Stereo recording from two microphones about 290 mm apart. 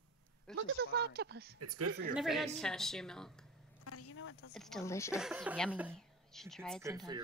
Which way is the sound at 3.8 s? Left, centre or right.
Left.